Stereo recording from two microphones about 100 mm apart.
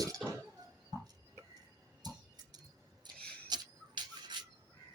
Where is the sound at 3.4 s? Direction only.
45° right (ahead or behind).